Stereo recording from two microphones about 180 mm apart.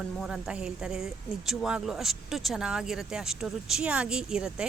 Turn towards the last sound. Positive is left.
turn(degrees=-5)  # may be behind; listen again after turning